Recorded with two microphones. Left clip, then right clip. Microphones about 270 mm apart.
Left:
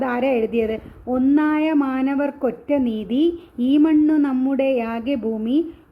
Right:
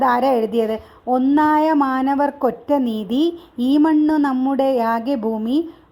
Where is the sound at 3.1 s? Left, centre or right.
Centre.